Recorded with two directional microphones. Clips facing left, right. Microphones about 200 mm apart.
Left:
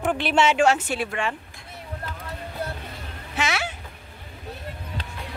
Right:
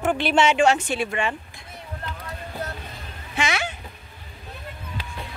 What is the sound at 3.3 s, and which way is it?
Speech, 5° left (ahead or behind).